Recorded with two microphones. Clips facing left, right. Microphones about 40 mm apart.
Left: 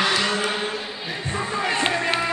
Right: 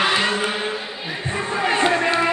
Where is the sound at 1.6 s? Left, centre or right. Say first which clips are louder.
Right 4 dB; centre.